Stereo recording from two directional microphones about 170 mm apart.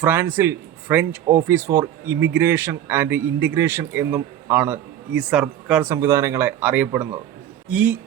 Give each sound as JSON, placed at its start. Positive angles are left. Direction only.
{"t": 0.0, "sound": "a man's voice", "side_deg": -15}